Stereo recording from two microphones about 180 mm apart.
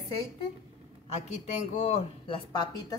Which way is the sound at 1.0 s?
40° left (ahead or behind).